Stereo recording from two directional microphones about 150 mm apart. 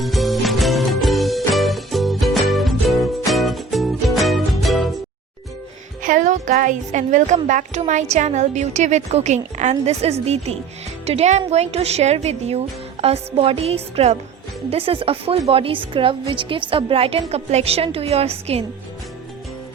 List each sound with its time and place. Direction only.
0.0 s music: centre (ahead or behind)
6.0 s a woman's voice: 60° right (ahead or behind); by 18.6 s 45° right (ahead or behind)